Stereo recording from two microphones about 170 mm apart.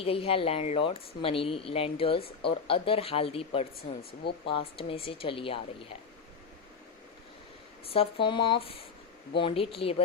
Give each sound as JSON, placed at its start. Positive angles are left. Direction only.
{"t": 0.0, "sound": "speech", "side_deg": 35}
{"t": 3.8, "sound": "speech", "side_deg": 70}
{"t": 4.8, "sound": "speech", "side_deg": 35}
{"t": 7.9, "sound": "speech", "side_deg": 30}